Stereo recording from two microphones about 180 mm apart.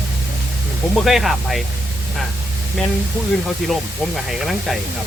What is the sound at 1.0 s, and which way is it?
Speech, centre (ahead or behind).